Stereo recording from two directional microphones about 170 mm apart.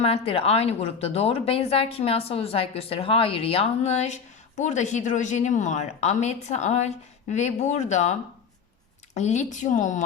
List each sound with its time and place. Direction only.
0.0 s a woman's voice: 35° left (ahead or behind)
9.1 s a woman's voice: 45° left (ahead or behind)